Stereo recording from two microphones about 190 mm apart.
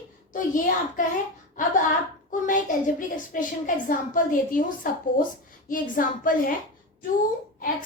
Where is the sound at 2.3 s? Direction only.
45° left (ahead or behind).